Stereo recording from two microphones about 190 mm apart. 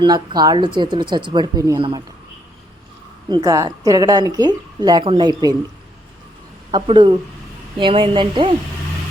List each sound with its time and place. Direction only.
0.0 s speech: 20° right (ahead or behind)
3.2 s speech: 20° right (ahead or behind)
6.7 s speech: 25° right (ahead or behind)